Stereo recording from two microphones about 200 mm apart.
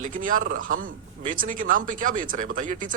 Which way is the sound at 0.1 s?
40° right (ahead or behind).